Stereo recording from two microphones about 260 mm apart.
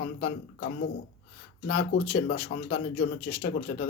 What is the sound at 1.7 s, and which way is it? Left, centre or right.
Speech, left.